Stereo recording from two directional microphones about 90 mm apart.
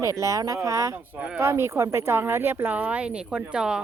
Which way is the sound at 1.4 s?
30° right (ahead or behind).